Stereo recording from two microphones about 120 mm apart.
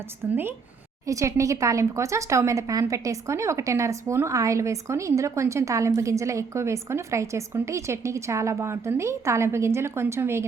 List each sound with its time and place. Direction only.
0.2 s speech: 15° right (ahead or behind)
1.0 s speech: 25° right (ahead or behind)